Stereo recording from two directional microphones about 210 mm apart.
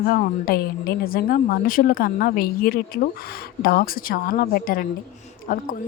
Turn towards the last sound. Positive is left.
turn(degrees=40)  # may be behind; listen again after turning